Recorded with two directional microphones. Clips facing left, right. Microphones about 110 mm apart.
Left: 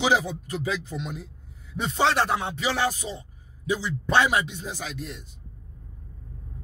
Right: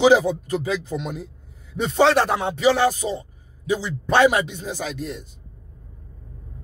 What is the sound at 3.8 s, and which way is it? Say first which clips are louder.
Speech: right 6 dB; 55° right (ahead or behind).